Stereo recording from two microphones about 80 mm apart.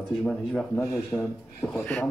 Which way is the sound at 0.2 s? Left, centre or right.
Centre.